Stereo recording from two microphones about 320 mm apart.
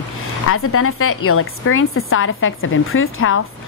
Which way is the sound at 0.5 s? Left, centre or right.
Left.